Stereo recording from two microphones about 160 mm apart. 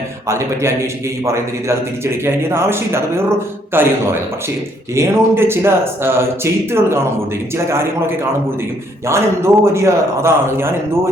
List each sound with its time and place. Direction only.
0.3 s a man's voice: 20° right (ahead or behind)
9.0 s a man's voice: 15° right (ahead or behind)